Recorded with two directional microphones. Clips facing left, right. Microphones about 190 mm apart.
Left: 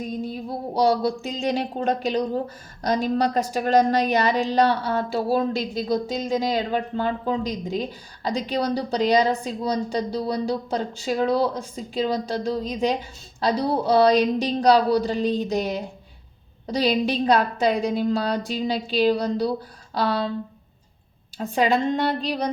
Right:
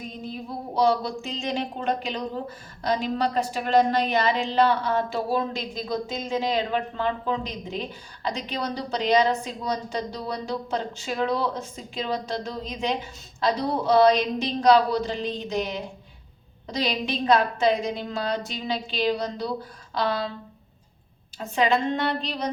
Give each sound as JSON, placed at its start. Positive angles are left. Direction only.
{"t": 0.7, "sound": "a woman's voice", "side_deg": 40}
{"t": 21.4, "sound": "a woman's voice", "side_deg": 35}